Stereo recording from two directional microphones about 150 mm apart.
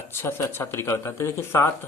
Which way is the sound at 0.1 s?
15° left (ahead or behind).